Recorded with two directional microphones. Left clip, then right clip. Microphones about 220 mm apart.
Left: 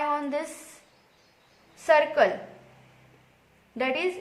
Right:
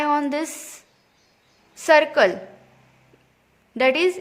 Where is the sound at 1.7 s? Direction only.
45° right (ahead or behind).